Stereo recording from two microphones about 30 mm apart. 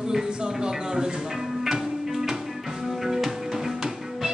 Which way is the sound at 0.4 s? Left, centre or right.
Right.